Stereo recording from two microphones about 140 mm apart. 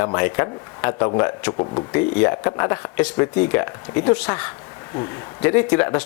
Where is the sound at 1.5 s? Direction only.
30° left (ahead or behind).